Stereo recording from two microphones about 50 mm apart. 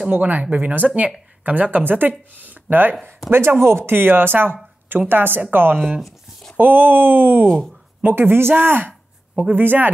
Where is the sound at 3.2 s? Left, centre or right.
Right.